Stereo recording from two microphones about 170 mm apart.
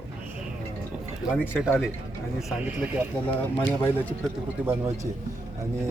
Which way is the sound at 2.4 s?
5° right (ahead or behind).